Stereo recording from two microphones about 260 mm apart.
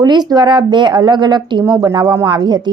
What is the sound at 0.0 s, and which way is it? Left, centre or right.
Speech, centre.